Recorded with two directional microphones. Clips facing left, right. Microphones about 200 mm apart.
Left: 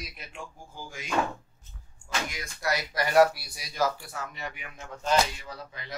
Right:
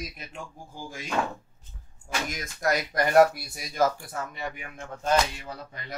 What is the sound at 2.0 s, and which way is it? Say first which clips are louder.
Speech: right 2 dB; 50° right (ahead or behind).